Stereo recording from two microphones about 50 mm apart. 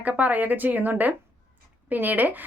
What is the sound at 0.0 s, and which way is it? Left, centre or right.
A woman's voice, right.